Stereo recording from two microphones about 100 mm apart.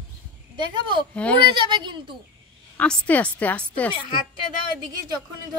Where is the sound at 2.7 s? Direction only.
10° left (ahead or behind).